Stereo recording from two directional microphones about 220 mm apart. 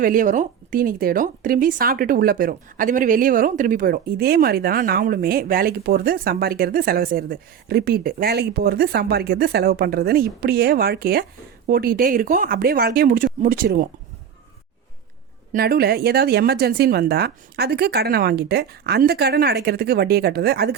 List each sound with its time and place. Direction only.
0.0 s speech: 40° right (ahead or behind)
15.5 s speech: 45° right (ahead or behind)